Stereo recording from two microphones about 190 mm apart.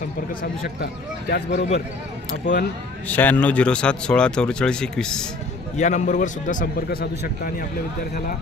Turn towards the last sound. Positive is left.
turn(degrees=50)  # may be behind; listen again after turning